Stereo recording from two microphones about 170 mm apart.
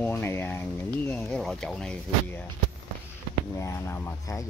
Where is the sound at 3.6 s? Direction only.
15° left (ahead or behind).